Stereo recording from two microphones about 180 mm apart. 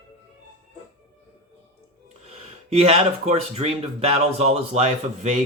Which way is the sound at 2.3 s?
35° right (ahead or behind).